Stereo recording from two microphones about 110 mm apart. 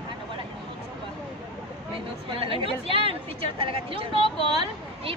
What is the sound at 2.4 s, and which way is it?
A woman's voice, 50° right (ahead or behind).